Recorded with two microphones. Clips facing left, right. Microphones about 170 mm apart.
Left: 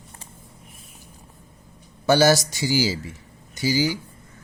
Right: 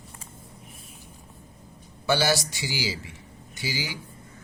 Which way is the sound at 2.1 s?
45° left (ahead or behind).